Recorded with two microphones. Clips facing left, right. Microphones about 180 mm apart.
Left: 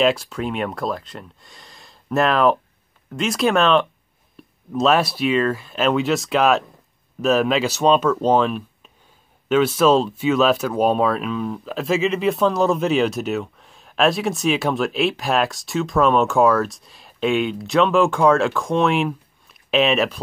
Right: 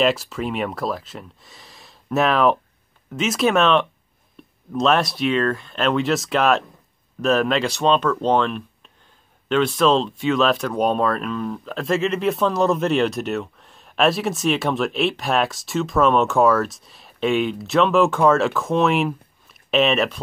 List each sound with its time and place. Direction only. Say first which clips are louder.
0.0 s speech: left 1 dB; centre (ahead or behind)
4.4 s a sound: even; centre (ahead or behind)
4.7 s speech: left 1 dB; centre (ahead or behind)